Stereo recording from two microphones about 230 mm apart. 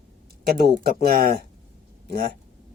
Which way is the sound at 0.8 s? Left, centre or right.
Right.